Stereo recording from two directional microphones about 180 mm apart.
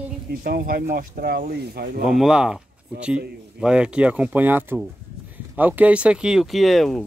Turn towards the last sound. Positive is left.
turn(degrees=0)  # may be behind; listen again after turning